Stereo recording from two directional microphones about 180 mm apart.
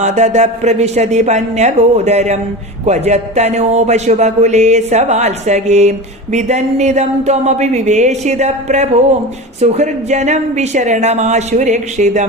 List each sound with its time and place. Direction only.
0.0 s a man's voice: 40° right (ahead or behind)